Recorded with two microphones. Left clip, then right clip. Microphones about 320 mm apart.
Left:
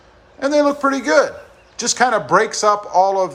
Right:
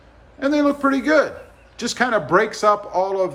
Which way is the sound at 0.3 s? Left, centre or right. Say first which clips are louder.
Left 3 dB; centre.